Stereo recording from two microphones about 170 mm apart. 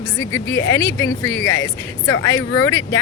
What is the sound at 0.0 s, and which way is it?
Speech, 20° left (ahead or behind).